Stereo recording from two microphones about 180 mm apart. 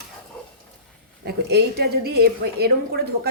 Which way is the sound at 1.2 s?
60° right (ahead or behind).